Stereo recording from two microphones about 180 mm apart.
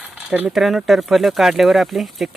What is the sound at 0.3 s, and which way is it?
Speech, 5° right (ahead or behind).